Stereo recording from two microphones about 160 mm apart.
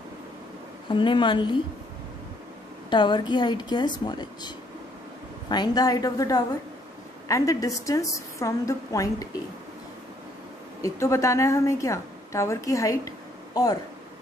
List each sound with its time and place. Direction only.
0.8 s a woman's voice: 30° left (ahead or behind)
2.9 s a woman's voice: 30° left (ahead or behind)
10.8 s a woman's voice: 20° left (ahead or behind)